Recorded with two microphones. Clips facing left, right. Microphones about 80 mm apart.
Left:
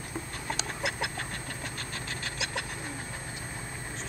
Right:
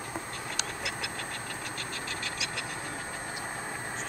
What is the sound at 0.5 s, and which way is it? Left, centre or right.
Chicken, left.